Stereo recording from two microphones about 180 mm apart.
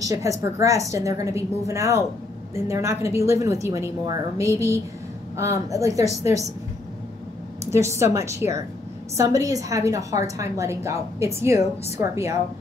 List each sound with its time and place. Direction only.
0.0 s a woman's voice: 20° right (ahead or behind)
7.7 s a woman's voice: 15° right (ahead or behind)